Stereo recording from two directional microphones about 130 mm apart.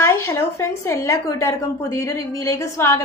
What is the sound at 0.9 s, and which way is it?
A woman's voice, 20° left (ahead or behind).